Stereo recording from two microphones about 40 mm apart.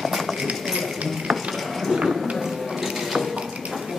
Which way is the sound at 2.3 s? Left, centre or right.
Centre.